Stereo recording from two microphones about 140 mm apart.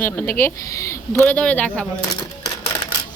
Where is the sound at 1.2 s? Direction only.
10° left (ahead or behind).